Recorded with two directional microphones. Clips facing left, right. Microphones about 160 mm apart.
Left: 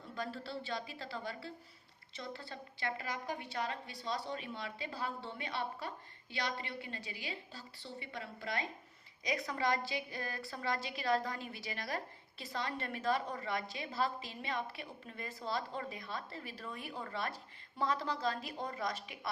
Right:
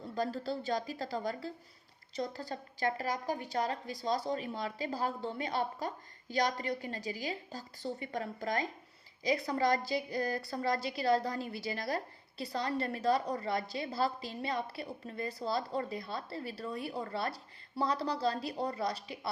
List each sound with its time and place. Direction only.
0.1 s a woman's voice: 35° right (ahead or behind)